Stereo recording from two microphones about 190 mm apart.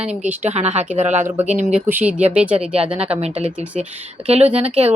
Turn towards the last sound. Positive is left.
turn(degrees=-35)  # may be behind; listen again after turning